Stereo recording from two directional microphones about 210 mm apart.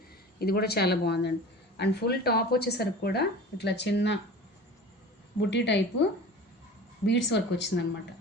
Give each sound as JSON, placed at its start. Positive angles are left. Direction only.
{"t": 0.3, "sound": "speech", "side_deg": 45}
{"t": 5.4, "sound": "speech", "side_deg": 55}
{"t": 7.0, "sound": "speech", "side_deg": 55}